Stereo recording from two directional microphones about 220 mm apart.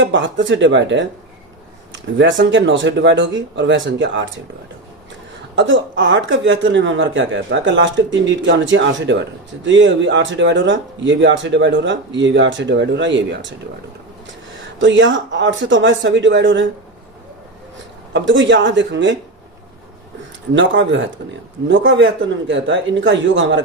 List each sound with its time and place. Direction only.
0.0 s speech: 55° right (ahead or behind)
5.5 s speech: 60° right (ahead or behind)
14.8 s speech: 55° right (ahead or behind)
18.1 s speech: 55° right (ahead or behind)
20.5 s speech: 55° right (ahead or behind)
22.4 s speech: 55° right (ahead or behind)